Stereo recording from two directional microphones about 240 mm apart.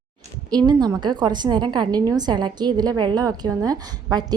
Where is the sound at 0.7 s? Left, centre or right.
Centre.